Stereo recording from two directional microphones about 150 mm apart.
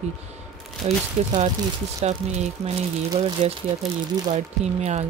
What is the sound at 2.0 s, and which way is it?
Speech, 45° right (ahead or behind).